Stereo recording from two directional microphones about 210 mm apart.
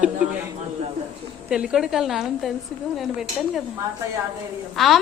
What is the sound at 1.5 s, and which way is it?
A child's voice, 5° right (ahead or behind).